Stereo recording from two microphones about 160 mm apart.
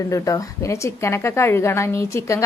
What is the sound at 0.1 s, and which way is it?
A woman's voice, 20° left (ahead or behind).